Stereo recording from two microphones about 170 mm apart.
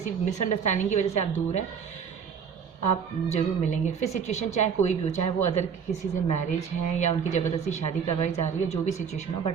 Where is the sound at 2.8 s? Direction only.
40° left (ahead or behind).